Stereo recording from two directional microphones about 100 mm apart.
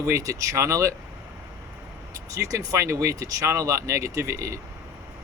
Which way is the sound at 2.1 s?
35° right (ahead or behind).